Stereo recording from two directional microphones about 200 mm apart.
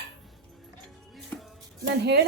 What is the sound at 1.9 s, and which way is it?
Speech, 55° right (ahead or behind).